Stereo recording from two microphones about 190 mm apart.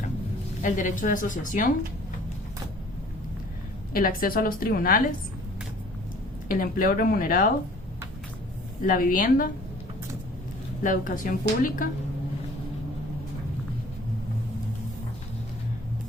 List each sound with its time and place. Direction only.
0.6 s a woman's voice: 45° left (ahead or behind)
3.9 s a woman's voice: 50° left (ahead or behind)
6.5 s a woman's voice: 45° left (ahead or behind)
8.8 s a woman's voice: 45° left (ahead or behind)
10.8 s a woman's voice: 45° left (ahead or behind)